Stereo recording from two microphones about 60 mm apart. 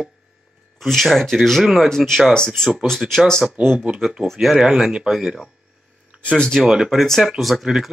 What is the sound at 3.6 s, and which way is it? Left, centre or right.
Speech, centre.